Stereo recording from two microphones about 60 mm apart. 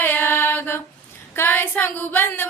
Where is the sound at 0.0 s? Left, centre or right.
Left.